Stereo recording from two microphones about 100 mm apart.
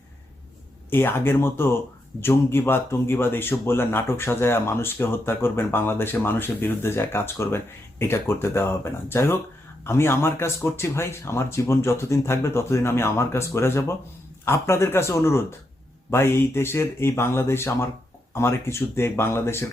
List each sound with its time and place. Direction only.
0.9 s speech: 20° left (ahead or behind)